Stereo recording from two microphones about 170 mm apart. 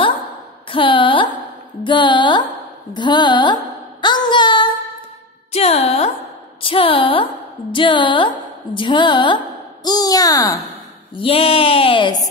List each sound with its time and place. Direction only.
0.7 s a sound: 30° left (ahead or behind)
1.8 s a woman's voice: 25° left (ahead or behind)
4.0 s a sound: 25° left (ahead or behind)
5.5 s music: 40° left (ahead or behind)
6.6 s a woman's voice: 30° left (ahead or behind)
11.1 s speech: 35° left (ahead or behind)